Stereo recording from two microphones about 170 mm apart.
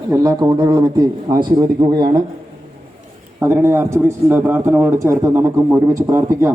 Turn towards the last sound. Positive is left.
turn(degrees=-15)  # may be behind; listen again after turning